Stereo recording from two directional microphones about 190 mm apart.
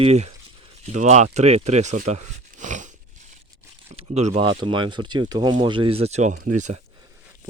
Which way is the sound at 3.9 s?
35° right (ahead or behind).